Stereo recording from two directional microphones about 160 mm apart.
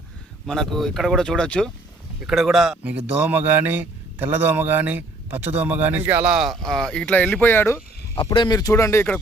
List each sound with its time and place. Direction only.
0.4 s speech: centre (ahead or behind)
8.1 s speech: 30° left (ahead or behind); by 9.2 s 15° left (ahead or behind)